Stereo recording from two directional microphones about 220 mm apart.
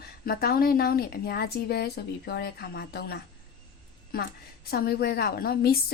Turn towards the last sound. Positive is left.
turn(degrees=45)  # may be behind; listen again after turning